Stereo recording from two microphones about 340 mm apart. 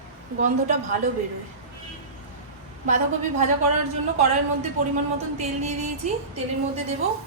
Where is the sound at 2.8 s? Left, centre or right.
Right.